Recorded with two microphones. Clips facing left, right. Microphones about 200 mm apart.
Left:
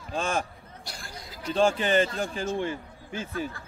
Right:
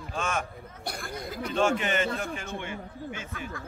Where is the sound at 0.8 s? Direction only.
55° right (ahead or behind).